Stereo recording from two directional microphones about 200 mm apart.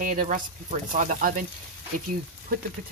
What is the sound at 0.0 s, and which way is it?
Speech, 45° right (ahead or behind).